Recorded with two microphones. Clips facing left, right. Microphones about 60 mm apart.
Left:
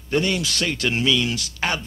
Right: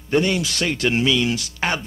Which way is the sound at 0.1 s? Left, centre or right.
Centre.